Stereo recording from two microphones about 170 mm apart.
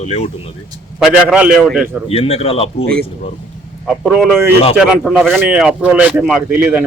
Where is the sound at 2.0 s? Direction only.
35° left (ahead or behind).